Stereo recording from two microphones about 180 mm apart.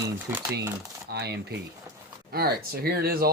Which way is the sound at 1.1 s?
65° right (ahead or behind).